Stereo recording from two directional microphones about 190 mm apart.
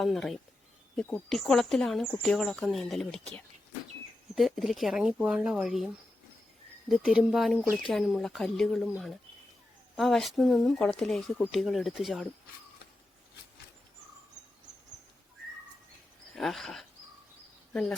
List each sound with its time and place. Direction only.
0.0 s speech: centre (ahead or behind)
4.4 s speech: centre (ahead or behind)
16.3 s speech: centre (ahead or behind)